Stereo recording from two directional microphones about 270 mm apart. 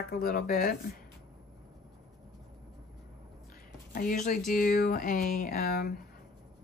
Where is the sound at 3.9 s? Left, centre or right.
Left.